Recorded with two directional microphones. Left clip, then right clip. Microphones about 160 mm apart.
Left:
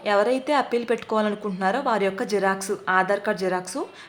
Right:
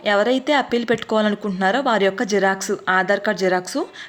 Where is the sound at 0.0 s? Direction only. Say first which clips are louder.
Right 3 dB; 20° right (ahead or behind).